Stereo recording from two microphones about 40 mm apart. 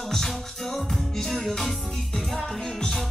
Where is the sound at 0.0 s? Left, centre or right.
Centre.